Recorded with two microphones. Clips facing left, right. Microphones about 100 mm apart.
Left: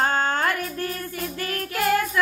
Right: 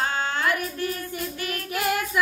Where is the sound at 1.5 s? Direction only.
20° right (ahead or behind).